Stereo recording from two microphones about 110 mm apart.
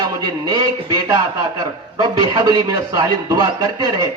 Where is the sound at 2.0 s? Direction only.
45° right (ahead or behind).